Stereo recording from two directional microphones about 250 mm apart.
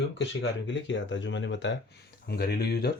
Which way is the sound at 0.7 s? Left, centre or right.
Left.